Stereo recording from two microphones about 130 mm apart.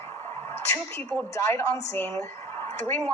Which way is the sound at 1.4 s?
20° left (ahead or behind).